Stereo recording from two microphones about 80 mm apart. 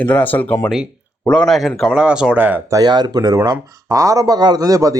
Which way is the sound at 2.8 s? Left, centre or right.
Right.